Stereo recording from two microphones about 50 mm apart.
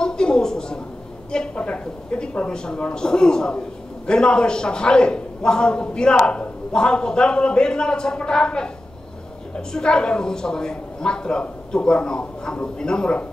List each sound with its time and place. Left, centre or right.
0.0 s a sound: centre
1.3 s a man's voice: centre
9.7 s a man's voice: centre